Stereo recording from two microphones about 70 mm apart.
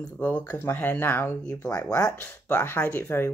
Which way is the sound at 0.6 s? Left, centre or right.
Left.